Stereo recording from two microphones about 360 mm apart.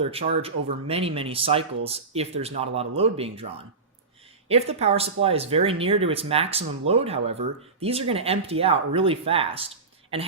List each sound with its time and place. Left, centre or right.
0.0 s speech: centre
4.4 s speech: centre